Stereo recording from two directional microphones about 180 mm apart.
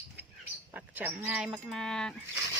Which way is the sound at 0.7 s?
10° right (ahead or behind).